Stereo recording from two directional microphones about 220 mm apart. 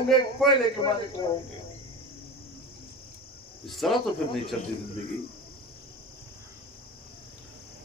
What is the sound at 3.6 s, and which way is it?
Speech, centre (ahead or behind).